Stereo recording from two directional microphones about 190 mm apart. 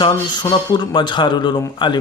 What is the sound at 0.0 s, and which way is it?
Speech, 25° left (ahead or behind).